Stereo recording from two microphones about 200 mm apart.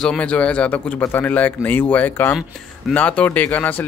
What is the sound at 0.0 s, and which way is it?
Speech, 5° left (ahead or behind).